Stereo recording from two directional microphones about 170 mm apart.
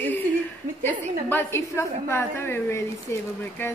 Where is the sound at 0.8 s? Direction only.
10° left (ahead or behind).